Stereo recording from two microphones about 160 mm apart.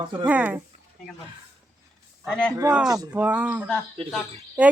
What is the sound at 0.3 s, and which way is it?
Speech, 10° right (ahead or behind).